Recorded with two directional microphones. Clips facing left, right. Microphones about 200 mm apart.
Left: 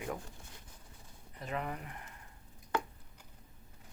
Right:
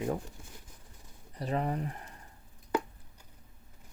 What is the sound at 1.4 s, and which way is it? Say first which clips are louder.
Speech: right 7 dB; 35° right (ahead or behind).